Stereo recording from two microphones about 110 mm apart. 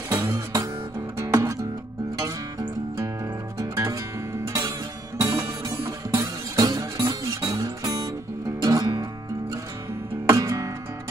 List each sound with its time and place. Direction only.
0.1 s guitar: 25° right (ahead or behind)
1.1 s music: 30° right (ahead or behind)
3.5 s music: 30° right (ahead or behind)
10.2 s music: 30° right (ahead or behind)